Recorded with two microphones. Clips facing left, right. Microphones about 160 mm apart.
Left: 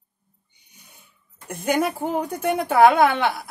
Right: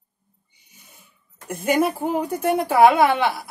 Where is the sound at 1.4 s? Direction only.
Centre (ahead or behind).